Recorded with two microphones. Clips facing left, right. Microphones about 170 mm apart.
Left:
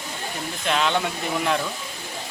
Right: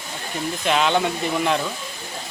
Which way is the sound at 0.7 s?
5° right (ahead or behind).